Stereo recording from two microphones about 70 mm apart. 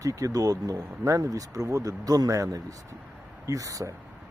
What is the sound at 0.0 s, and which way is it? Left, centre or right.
Speech, right.